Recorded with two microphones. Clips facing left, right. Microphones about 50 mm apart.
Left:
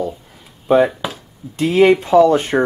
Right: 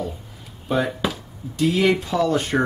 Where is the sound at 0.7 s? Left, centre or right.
Left.